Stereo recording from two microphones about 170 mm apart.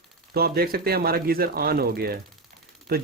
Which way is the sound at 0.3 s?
65° right (ahead or behind).